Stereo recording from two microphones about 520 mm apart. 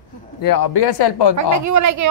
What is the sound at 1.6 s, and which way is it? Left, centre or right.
Speech, right.